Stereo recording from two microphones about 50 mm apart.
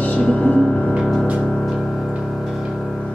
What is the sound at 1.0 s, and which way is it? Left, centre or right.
Music, centre.